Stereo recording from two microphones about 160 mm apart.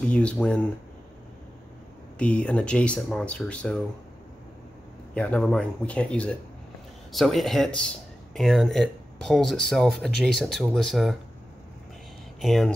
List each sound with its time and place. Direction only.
0.1 s speech: 5° left (ahead or behind)
2.1 s speech: 5° left (ahead or behind)
5.1 s speech: 5° left (ahead or behind)
12.4 s speech: centre (ahead or behind)